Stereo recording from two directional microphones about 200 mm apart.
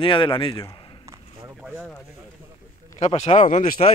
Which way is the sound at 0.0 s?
25° left (ahead or behind).